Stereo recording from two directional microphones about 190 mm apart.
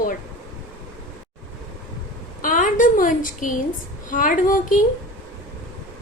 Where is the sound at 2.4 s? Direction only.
45° left (ahead or behind).